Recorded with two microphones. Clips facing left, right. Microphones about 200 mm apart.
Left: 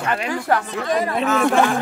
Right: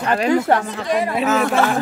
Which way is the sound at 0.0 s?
35° right (ahead or behind).